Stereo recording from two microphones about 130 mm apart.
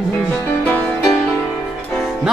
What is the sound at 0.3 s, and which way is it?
Music, 15° left (ahead or behind).